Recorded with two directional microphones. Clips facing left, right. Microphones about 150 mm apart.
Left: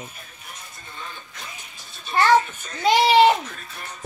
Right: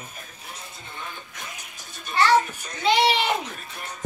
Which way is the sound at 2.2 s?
50° left (ahead or behind).